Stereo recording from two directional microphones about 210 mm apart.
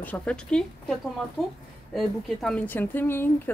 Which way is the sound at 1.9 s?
5° left (ahead or behind).